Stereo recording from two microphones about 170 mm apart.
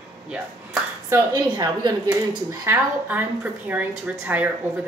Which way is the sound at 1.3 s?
25° right (ahead or behind).